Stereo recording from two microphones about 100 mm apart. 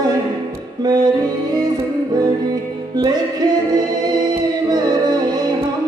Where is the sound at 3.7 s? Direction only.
40° right (ahead or behind).